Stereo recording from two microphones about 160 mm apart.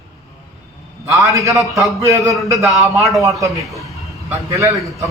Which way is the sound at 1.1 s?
20° right (ahead or behind).